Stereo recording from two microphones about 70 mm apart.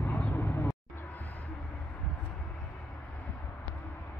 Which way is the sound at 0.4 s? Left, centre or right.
Left.